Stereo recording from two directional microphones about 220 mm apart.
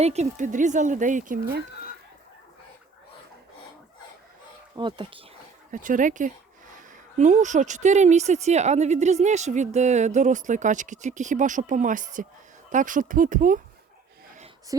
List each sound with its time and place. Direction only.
0.0 s speech: 30° right (ahead or behind)
4.8 s speech: 20° right (ahead or behind)
5.7 s speech: 35° right (ahead or behind)
14.7 s speech: 15° right (ahead or behind)